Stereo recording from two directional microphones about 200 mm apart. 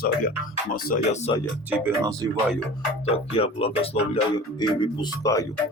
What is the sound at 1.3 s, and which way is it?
Speech, 25° left (ahead or behind).